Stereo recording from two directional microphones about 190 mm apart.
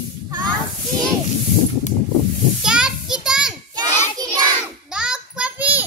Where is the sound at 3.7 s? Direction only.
20° right (ahead or behind).